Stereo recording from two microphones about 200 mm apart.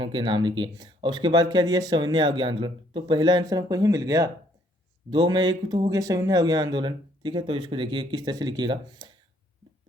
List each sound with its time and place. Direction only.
0.0 s speech: 25° right (ahead or behind)